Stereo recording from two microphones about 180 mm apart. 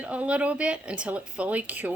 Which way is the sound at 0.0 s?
5° right (ahead or behind).